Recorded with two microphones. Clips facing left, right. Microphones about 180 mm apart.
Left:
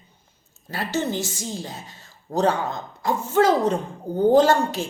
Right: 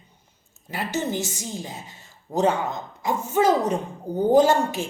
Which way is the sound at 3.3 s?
20° right (ahead or behind).